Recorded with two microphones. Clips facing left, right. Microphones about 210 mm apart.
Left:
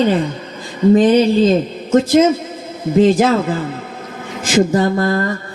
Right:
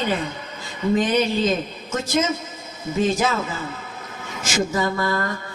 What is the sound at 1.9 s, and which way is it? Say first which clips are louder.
A woman's voice: left 12 dB; 55° left (ahead or behind).